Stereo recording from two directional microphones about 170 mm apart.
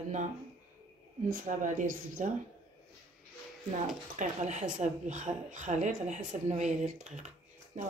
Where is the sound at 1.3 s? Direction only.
50° right (ahead or behind).